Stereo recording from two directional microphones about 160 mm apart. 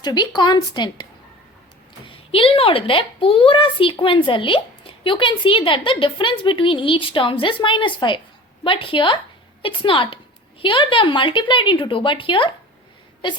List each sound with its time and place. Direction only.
0.0 s speech: 25° left (ahead or behind)
2.0 s a woman's voice: 35° left (ahead or behind)